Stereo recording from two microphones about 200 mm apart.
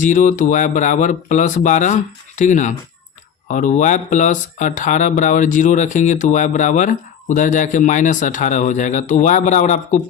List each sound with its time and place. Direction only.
0.0 s speech: 40° left (ahead or behind)